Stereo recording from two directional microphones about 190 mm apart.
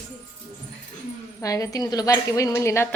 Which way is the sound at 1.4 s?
15° left (ahead or behind).